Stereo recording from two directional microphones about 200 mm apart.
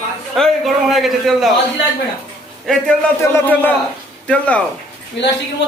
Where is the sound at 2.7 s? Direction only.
Centre (ahead or behind).